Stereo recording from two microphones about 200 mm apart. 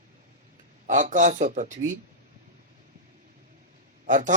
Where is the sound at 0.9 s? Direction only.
40° right (ahead or behind).